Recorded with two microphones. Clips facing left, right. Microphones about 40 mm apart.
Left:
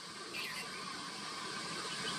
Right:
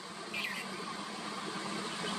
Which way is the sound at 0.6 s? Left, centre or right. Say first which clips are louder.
Right 4 dB; right.